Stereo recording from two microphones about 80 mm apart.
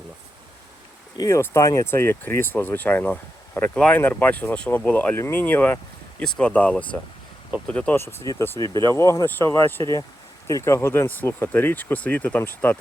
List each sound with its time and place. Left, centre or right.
1.3 s speech: left
6.2 s speech: centre
6.5 s speech: centre
7.9 s speech: left
8.6 s speech: left